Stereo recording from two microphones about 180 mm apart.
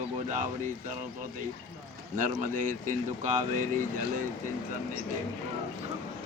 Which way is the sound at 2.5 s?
45° right (ahead or behind).